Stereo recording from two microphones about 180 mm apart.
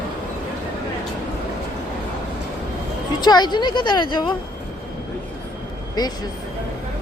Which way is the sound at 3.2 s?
25° left (ahead or behind).